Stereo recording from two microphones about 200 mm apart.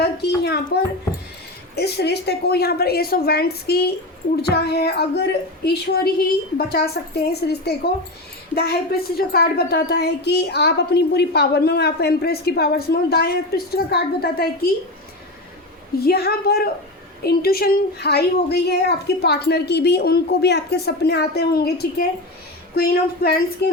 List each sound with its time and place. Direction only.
0.0 s a child's voice: 55° left (ahead or behind)
1.7 s speech: 55° left (ahead or behind)
16.0 s speech: 50° left (ahead or behind)